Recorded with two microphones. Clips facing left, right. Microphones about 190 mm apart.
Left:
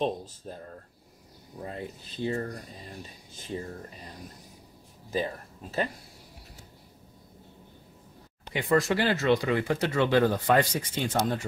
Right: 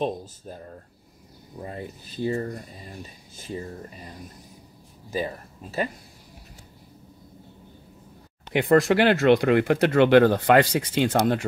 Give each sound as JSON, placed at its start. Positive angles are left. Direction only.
{"t": 0.0, "sound": "speech", "side_deg": -5}
{"t": 1.6, "sound": "speech", "side_deg": -5}
{"t": 5.1, "sound": "speech", "side_deg": -10}
{"t": 8.5, "sound": "speech", "side_deg": -60}